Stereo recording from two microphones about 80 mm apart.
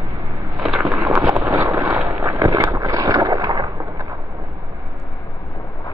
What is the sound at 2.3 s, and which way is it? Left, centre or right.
Vehicle, right.